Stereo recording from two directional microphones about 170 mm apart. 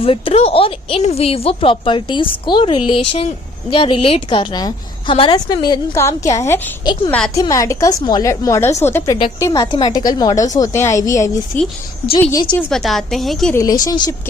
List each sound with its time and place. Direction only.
0.0 s a woman's voice: 35° left (ahead or behind); by 9.1 s 15° left (ahead or behind)
9.4 s a woman's voice: 25° left (ahead or behind)
12.3 s a woman's voice: 25° left (ahead or behind)
12.6 s a woman's voice: centre (ahead or behind)
13.5 s a woman's voice: 20° left (ahead or behind)